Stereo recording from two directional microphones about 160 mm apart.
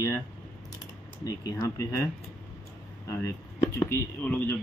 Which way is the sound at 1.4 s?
20° left (ahead or behind).